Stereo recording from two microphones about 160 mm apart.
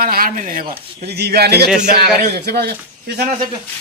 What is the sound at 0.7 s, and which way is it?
Speech, 90° right.